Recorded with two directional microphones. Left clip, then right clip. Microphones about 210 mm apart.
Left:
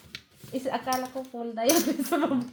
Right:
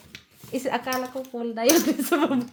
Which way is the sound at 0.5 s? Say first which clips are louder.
Right 2 dB; 50° right (ahead or behind).